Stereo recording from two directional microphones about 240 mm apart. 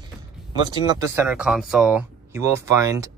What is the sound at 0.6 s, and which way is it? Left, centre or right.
Speech, centre.